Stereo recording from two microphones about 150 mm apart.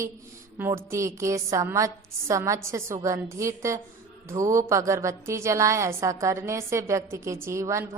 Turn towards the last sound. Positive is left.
turn(degrees=-20)  # may be behind; listen again after turning